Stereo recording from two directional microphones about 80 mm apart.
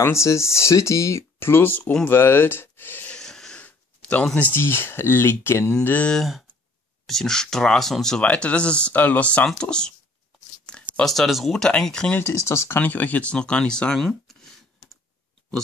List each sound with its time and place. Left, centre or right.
0.0 s speech: left; by 2.1 s centre
2.1 s speech: left
3.2 s a sound: centre
4.4 s speech: left
5.9 s speech: centre
6.1 s speech: centre
11.6 s speech: centre
12.2 s speech: left
12.8 s speech: left
14.0 s a sound: centre